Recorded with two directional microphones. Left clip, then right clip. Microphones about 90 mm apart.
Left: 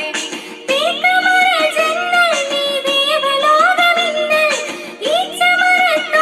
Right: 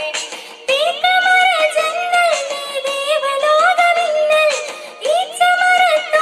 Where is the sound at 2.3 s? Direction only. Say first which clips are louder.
Left 3 dB; 30° right (ahead or behind).